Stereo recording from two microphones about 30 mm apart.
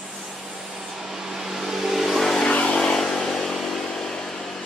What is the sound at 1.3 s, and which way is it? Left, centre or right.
Vehicle, centre.